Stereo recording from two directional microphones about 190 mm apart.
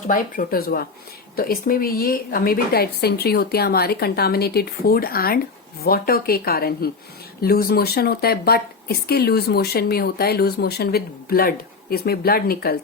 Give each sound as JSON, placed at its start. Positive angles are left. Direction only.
{"t": 0.1, "sound": "a woman's voice", "side_deg": 45}